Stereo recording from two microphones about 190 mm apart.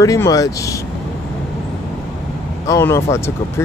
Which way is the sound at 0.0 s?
15° left (ahead or behind).